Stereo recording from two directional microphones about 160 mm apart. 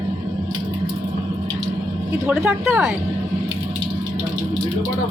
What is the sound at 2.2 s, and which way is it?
Speech, 15° right (ahead or behind).